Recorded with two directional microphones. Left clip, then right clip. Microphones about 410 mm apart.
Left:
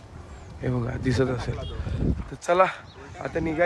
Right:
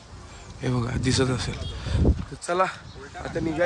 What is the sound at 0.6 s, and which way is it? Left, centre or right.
Speech, centre.